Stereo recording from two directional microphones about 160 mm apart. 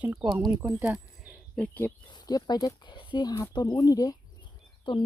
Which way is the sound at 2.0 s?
25° left (ahead or behind).